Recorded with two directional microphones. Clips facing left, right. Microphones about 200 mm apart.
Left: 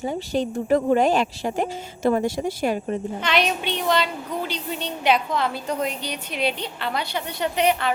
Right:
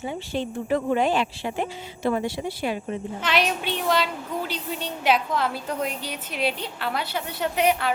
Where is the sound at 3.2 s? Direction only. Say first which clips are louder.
Even; 5° right (ahead or behind).